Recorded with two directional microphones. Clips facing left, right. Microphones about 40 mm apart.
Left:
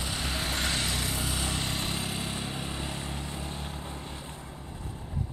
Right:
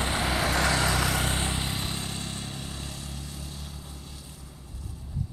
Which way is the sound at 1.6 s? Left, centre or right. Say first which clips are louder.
Even; centre.